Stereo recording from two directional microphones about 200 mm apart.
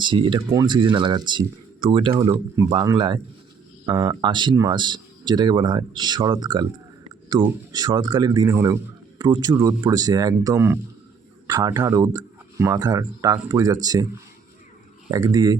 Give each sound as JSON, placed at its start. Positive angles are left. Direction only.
{"t": 0.0, "sound": "a man's voice", "side_deg": -25}
{"t": 2.3, "sound": "a man's voice", "side_deg": -15}
{"t": 15.1, "sound": "a man's voice", "side_deg": -20}